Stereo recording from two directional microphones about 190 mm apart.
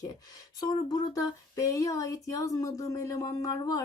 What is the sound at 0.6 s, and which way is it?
Speech, 20° left (ahead or behind).